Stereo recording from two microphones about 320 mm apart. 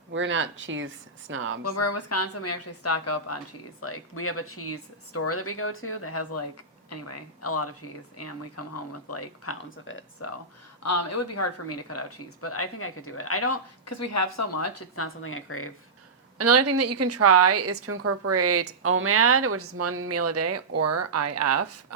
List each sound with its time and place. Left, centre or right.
0.1 s speech: right
1.6 s speech: left
10.8 s speech: left
16.4 s a woman's voice: right